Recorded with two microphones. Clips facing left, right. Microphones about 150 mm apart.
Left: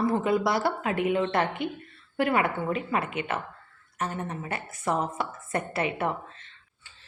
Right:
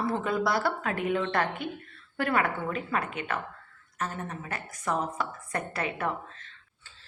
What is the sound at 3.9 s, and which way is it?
A woman's voice, 25° left (ahead or behind).